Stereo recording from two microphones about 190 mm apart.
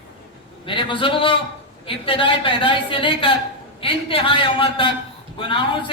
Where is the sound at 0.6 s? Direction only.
25° left (ahead or behind).